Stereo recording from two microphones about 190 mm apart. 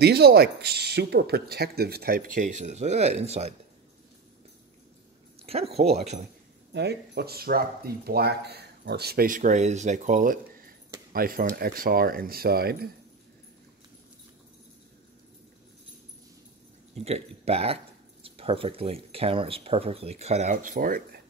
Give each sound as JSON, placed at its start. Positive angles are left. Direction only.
{"t": 0.0, "sound": "speech", "side_deg": -55}
{"t": 5.5, "sound": "speech", "side_deg": -30}
{"t": 6.7, "sound": "speech", "side_deg": -60}
{"t": 17.0, "sound": "speech", "side_deg": -35}